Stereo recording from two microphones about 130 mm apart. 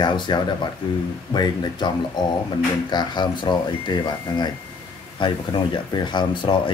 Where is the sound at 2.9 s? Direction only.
35° left (ahead or behind).